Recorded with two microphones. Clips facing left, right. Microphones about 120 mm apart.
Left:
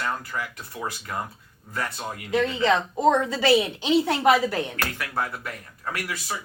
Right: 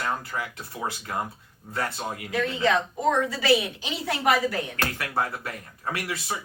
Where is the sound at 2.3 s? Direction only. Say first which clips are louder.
Left 2 dB; 25° left (ahead or behind).